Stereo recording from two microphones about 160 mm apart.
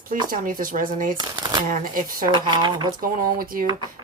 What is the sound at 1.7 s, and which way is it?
Speech, 60° right (ahead or behind).